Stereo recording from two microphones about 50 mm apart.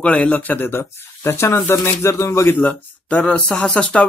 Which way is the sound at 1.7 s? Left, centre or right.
Left.